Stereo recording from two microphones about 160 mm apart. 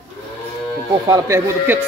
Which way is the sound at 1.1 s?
15° right (ahead or behind).